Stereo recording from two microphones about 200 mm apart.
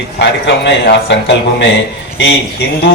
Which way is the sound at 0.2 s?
60° left (ahead or behind).